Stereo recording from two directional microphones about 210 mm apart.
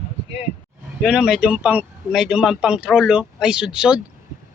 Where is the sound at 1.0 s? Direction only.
5° right (ahead or behind).